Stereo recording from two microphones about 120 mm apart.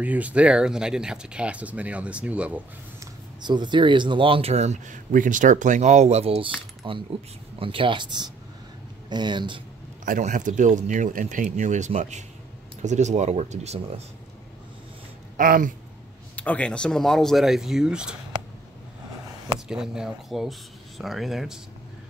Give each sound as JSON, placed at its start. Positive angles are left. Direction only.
{"t": 0.0, "sound": "speech", "side_deg": -10}
{"t": 3.4, "sound": "speech", "side_deg": -40}
{"t": 6.8, "sound": "speech", "side_deg": -40}
{"t": 10.0, "sound": "speech", "side_deg": -90}
{"t": 16.3, "sound": "speech", "side_deg": 10}
{"t": 19.7, "sound": "speech", "side_deg": -5}